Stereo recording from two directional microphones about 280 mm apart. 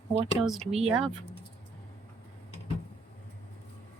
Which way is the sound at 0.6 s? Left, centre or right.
Right.